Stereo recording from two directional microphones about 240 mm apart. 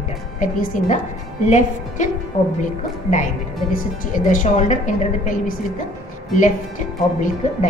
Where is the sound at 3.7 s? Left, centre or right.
Left.